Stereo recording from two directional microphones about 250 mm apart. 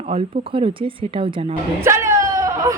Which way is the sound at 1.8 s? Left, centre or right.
Centre.